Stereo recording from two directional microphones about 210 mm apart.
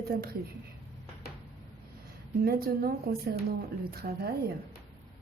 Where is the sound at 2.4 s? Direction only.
45° right (ahead or behind).